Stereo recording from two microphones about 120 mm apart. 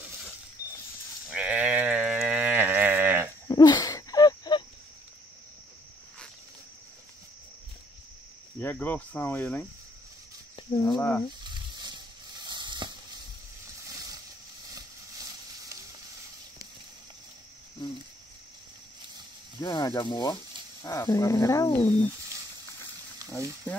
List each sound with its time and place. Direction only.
1.3 s sheep: 10° right (ahead or behind)
3.4 s a sound: 35° left (ahead or behind)
8.5 s speech: 15° left (ahead or behind)
11.0 s speech: 15° left (ahead or behind)
11.4 s stir: 40° right (ahead or behind)
12.4 s a sound: 35° right (ahead or behind)
19.6 s speech: 35° left (ahead or behind)
20.8 s speech: 25° left (ahead or behind)
21.8 s speech: 15° left (ahead or behind)
23.1 s a sound: 25° right (ahead or behind)